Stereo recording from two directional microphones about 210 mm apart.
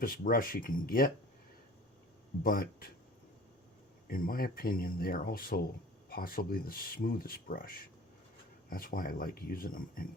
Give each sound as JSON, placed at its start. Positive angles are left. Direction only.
{"t": 0.0, "sound": "speech", "side_deg": 40}
{"t": 2.4, "sound": "speech", "side_deg": 45}
{"t": 4.1, "sound": "speech", "side_deg": 45}